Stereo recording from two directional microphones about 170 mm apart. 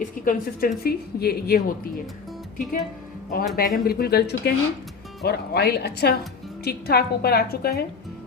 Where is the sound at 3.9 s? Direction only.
65° left (ahead or behind).